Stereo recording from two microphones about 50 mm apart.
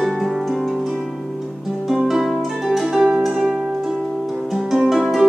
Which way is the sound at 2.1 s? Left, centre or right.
Centre.